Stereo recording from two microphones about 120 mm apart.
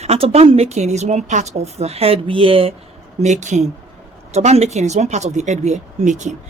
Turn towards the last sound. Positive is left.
turn(degrees=-90)